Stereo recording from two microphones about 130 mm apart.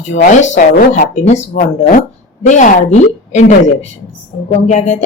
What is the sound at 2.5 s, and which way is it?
Speech, 75° left (ahead or behind).